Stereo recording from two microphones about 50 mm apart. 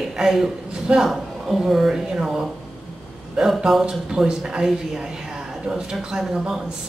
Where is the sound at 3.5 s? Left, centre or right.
Centre.